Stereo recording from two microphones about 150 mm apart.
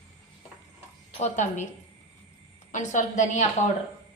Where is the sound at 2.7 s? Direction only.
55° left (ahead or behind).